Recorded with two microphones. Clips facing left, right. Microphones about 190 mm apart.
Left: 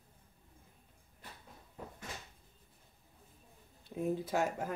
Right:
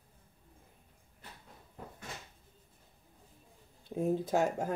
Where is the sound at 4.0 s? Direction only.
45° right (ahead or behind).